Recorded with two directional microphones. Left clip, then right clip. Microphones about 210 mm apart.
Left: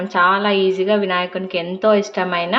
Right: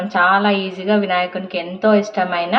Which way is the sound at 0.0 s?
15° left (ahead or behind).